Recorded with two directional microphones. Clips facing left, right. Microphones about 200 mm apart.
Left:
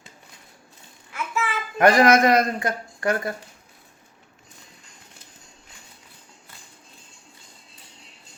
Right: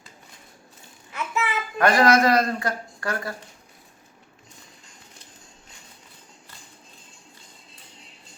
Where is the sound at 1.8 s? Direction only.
20° left (ahead or behind).